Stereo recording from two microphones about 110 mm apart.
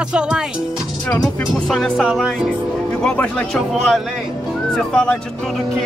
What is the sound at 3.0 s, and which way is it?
Speech, 10° left (ahead or behind).